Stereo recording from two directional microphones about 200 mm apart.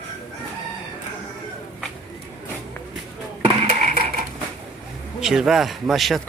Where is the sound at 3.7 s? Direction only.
45° right (ahead or behind).